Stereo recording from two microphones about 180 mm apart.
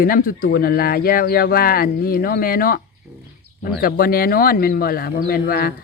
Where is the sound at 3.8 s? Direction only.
55° left (ahead or behind).